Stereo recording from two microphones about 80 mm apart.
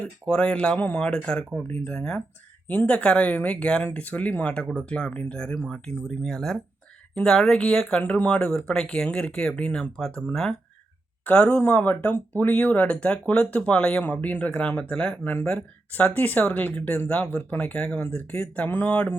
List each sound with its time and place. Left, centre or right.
0.0 s speech: centre
11.3 s speech: centre